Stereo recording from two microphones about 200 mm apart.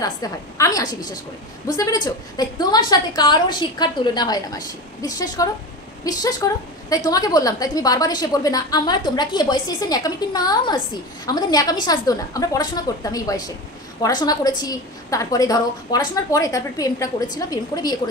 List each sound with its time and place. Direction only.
0.0 s a woman's voice: 15° left (ahead or behind)